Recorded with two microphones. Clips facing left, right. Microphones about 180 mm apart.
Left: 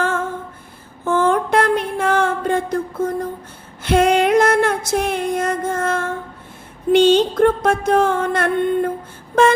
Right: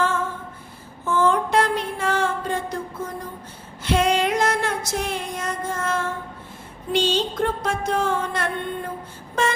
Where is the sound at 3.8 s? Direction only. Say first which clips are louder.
Left 6 dB; 55° left (ahead or behind).